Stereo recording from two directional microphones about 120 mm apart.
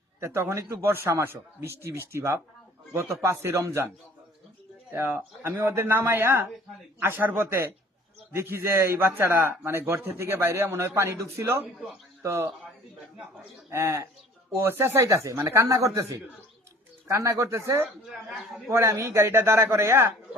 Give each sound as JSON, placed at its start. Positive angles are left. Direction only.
{"t": 0.2, "sound": "a man's voice", "side_deg": -20}
{"t": 4.9, "sound": "a man's voice", "side_deg": -20}
{"t": 13.7, "sound": "a man's voice", "side_deg": -25}
{"t": 18.1, "sound": "speech", "side_deg": 0}
{"t": 18.7, "sound": "a man's voice", "side_deg": -25}